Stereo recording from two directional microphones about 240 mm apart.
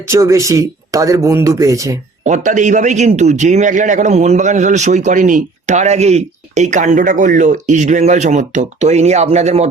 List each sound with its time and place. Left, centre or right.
0.1 s speech: centre
2.2 s a man's voice: right